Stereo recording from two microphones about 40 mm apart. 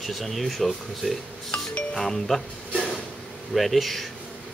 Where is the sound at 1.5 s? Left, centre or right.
Left.